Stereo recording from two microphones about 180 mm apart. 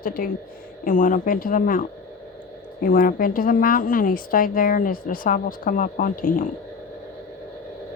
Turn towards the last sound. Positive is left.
turn(degrees=50)  # may be behind; listen again after turning